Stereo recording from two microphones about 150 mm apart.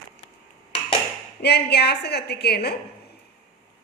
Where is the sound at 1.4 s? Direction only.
90° left.